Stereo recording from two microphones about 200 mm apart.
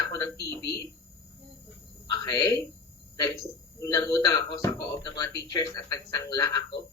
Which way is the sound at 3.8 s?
15° left (ahead or behind).